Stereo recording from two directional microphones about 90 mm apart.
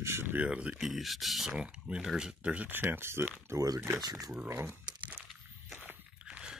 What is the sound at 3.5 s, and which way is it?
Speech, 45° right (ahead or behind).